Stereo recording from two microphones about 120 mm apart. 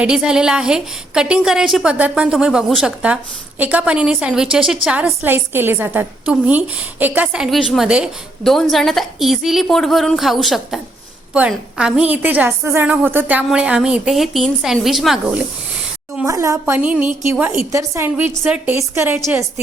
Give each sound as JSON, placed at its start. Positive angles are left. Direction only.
{"t": 0.0, "sound": "a woman's voice", "side_deg": -5}
{"t": 16.2, "sound": "a woman's voice", "side_deg": -25}
{"t": 17.7, "sound": "a woman's voice", "side_deg": -25}